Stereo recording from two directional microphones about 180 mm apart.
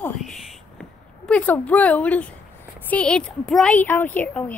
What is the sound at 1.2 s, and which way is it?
A woman's voice, 10° left (ahead or behind).